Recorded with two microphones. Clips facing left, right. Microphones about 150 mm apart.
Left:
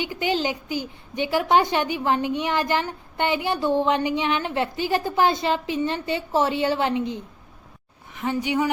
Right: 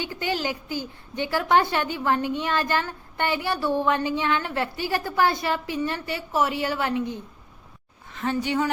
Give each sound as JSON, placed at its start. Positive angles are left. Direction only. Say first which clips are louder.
{"t": 0.0, "sound": "a woman's voice", "louder": "left 3 dB", "side_deg": 15}